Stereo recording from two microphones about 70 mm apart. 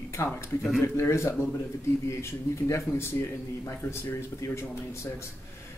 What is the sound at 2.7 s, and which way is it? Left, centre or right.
Speech, left.